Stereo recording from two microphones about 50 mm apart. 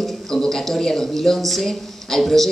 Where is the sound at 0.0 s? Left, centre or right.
Centre.